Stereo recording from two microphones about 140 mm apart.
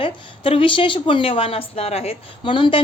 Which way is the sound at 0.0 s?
40° left (ahead or behind).